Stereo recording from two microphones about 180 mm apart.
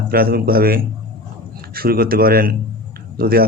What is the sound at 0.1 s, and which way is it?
A man's voice, 55° right (ahead or behind).